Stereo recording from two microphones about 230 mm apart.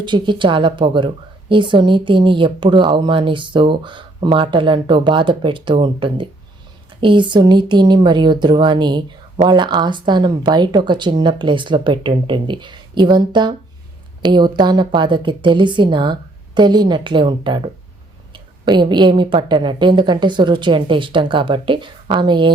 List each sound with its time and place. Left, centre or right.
0.0 s a woman's voice: centre
18.6 s a woman's voice: centre